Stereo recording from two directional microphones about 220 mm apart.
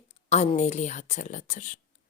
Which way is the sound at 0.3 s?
30° left (ahead or behind).